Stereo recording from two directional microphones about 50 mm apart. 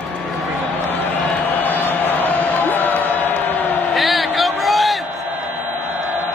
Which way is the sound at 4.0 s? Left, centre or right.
Centre.